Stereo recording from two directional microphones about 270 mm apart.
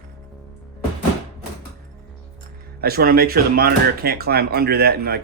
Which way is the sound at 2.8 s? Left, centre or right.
Right.